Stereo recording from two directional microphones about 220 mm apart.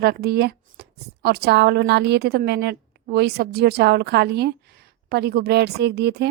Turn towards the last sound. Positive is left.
turn(degrees=-50)  # may be behind; listen again after turning